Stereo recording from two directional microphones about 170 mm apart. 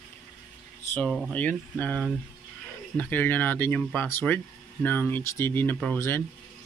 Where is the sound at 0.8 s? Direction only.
10° left (ahead or behind).